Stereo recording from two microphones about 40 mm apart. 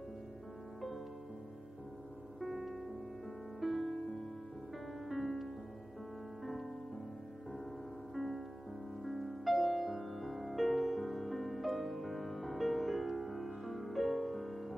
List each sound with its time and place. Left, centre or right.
2.4 s music: centre
5.0 s music: centre
8.1 s music: centre